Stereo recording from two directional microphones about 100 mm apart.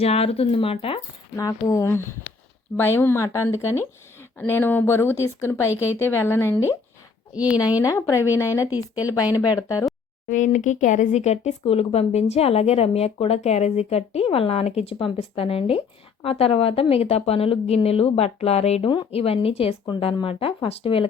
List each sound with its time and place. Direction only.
0.0 s speech: 85° left; by 1.0 s 70° left (ahead or behind)
1.4 s speech: 35° left (ahead or behind)
7.3 s speech: 15° right (ahead or behind)
7.8 s speech: 35° left (ahead or behind)
8.6 s speech: 15° right (ahead or behind)
9.0 s speech: 35° left (ahead or behind)
11.3 s speech: 80° left
14.9 s speech: 80° left
16.9 s speech: 90° left
19.1 s speech: 75° left (ahead or behind)